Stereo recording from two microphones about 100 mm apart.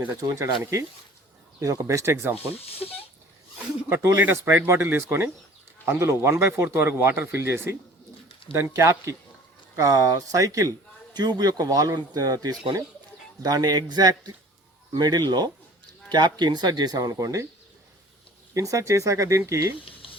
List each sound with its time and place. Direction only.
0.2 s a man's voice: 30° right (ahead or behind)
2.5 s speech: 75° left (ahead or behind)
3.8 s a man's voice: 25° right (ahead or behind)
18.5 s a man's voice: 35° right (ahead or behind)
19.8 s boiling: 65° left (ahead or behind)